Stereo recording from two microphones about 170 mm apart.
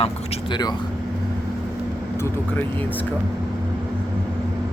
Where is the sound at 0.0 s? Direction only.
35° left (ahead or behind).